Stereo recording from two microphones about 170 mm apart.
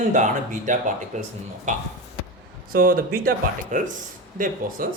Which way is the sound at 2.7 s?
55° right (ahead or behind).